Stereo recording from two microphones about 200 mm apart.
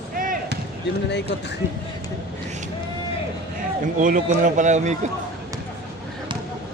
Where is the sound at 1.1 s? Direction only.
60° left (ahead or behind).